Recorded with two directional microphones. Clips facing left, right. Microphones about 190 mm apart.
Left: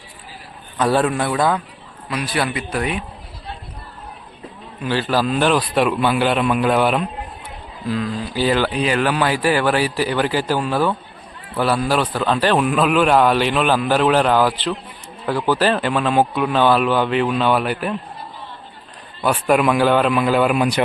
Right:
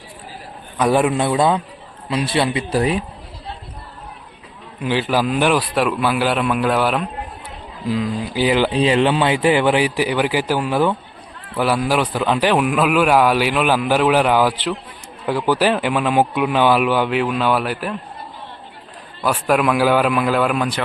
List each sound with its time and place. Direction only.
0.8 s a man's voice: 15° right (ahead or behind); by 3.0 s 30° right (ahead or behind)
4.8 s a man's voice: 15° right (ahead or behind); by 7.1 s centre (ahead or behind)
7.9 s a man's voice: 15° right (ahead or behind)
8.7 s a man's voice: 25° right (ahead or behind); by 17.9 s centre (ahead or behind)
19.2 s a man's voice: centre (ahead or behind)